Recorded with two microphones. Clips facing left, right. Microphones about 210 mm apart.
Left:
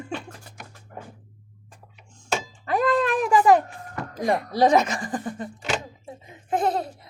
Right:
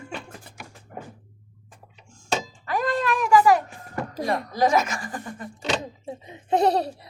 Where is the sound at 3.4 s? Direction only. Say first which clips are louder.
Left 2 dB; 35° left (ahead or behind).